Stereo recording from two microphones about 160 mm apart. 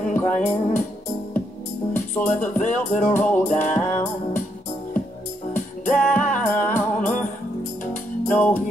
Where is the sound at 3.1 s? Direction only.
10° left (ahead or behind).